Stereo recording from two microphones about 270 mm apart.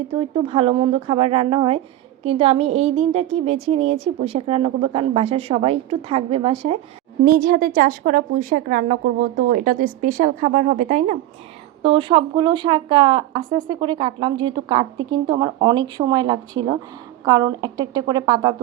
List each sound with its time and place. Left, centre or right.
0.2 s a woman's voice: right
7.3 s a woman's voice: right; by 18.5 s centre